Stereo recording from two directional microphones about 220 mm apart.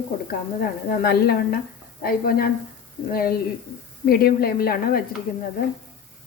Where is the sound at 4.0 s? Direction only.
45° left (ahead or behind).